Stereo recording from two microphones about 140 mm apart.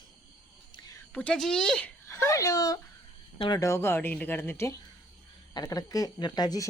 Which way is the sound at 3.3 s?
35° left (ahead or behind).